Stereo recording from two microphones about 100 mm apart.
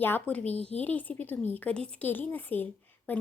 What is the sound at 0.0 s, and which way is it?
A woman's voice, 15° left (ahead or behind).